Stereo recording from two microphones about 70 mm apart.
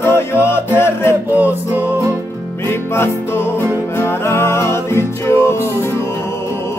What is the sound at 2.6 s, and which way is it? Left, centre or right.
Music, left.